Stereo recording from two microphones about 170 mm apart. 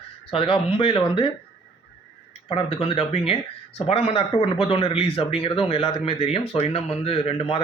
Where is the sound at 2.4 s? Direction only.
35° left (ahead or behind).